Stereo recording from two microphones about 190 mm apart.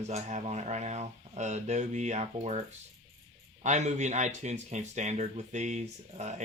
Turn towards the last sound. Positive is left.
turn(degrees=-35)  # may be behind; listen again after turning